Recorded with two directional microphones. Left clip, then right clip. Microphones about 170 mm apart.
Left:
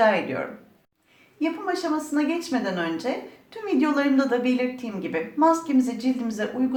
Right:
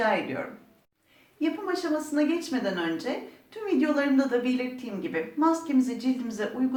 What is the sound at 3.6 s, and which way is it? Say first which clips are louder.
A woman's voice: left 3 dB; 40° left (ahead or behind).